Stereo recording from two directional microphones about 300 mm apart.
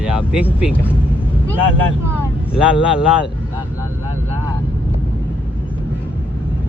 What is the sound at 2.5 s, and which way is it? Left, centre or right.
Speech, centre.